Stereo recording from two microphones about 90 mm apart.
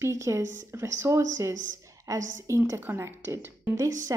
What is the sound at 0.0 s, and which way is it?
A woman's voice, 35° right (ahead or behind).